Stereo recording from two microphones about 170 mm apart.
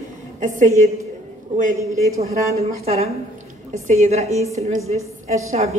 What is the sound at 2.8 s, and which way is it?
A woman's voice, 40° right (ahead or behind).